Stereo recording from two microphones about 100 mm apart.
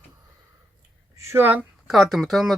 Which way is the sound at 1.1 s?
30° right (ahead or behind).